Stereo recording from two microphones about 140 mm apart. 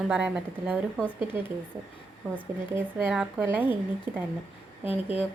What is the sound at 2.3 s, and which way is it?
Speech, 15° right (ahead or behind).